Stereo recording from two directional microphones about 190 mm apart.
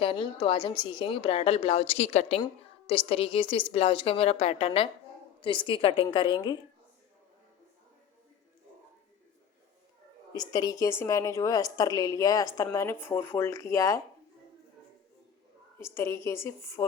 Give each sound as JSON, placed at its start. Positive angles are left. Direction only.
{"t": 0.0, "sound": "a woman's voice", "side_deg": 30}
{"t": 10.3, "sound": "a woman's voice", "side_deg": 20}
{"t": 15.8, "sound": "a woman's voice", "side_deg": 15}